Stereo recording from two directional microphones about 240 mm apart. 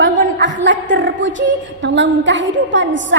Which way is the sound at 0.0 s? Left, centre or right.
Right.